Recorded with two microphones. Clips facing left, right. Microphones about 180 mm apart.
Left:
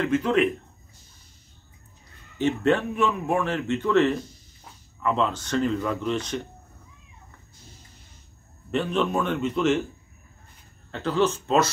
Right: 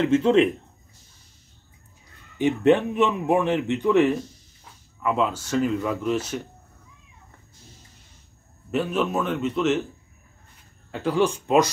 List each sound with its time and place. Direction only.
0.0 s a man's voice: 25° right (ahead or behind)
2.3 s speech: 15° right (ahead or behind)
8.7 s a man's voice: 5° right (ahead or behind)
10.9 s speech: 10° right (ahead or behind)